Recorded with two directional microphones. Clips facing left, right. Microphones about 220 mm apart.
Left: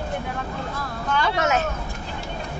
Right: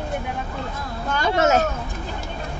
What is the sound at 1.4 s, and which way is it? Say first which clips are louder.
Speech: right 7 dB; 35° right (ahead or behind).